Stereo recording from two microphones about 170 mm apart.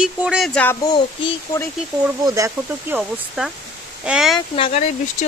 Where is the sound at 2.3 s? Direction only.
20° right (ahead or behind).